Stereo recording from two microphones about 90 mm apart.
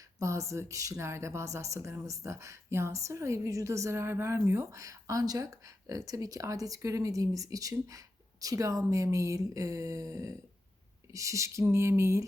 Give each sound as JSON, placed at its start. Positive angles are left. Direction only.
{"t": 0.2, "sound": "speech", "side_deg": -35}